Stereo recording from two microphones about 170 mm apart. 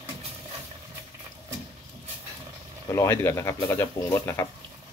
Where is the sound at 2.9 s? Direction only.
15° left (ahead or behind).